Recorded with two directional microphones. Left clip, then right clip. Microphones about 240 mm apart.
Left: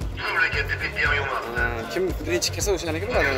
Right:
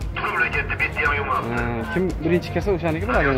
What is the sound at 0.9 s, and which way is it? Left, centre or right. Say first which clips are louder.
Music: even; left.